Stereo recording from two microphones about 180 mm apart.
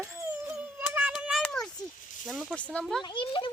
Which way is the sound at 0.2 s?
10° right (ahead or behind).